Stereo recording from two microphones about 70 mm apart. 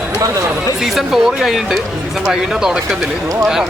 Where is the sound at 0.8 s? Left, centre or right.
Centre.